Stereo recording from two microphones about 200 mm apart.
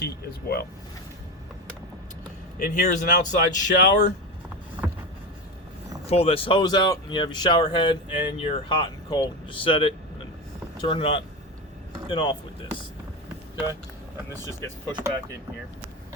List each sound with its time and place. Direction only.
0.0 s speech: 55° left (ahead or behind)
2.6 s speech: 40° left (ahead or behind)
4.8 s vehicle: 10° right (ahead or behind)
6.1 s speech: 30° left (ahead or behind)